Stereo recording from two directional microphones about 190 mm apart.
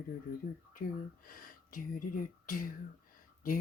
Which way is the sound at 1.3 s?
45° left (ahead or behind).